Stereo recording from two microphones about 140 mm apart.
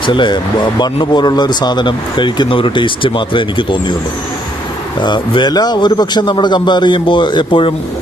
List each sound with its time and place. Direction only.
0.0 s speech: 35° left (ahead or behind)
4.9 s speech: 35° left (ahead or behind)